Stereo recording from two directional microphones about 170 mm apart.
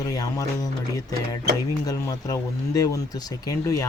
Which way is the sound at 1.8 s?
20° left (ahead or behind).